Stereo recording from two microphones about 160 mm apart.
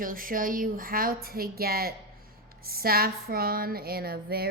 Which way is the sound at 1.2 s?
70° right (ahead or behind).